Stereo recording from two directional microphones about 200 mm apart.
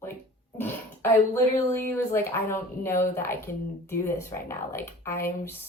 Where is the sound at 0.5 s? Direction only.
10° left (ahead or behind).